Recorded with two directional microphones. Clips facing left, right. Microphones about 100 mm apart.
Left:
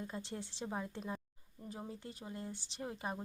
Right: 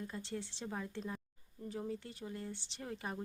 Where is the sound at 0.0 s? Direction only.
20° left (ahead or behind).